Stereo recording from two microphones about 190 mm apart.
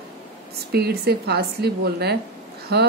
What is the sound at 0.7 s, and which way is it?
Speech, 55° right (ahead or behind).